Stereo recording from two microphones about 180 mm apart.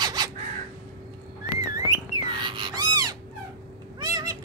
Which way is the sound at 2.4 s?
25° right (ahead or behind).